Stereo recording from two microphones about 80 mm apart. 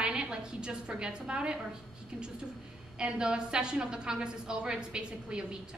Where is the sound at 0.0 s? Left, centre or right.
Centre.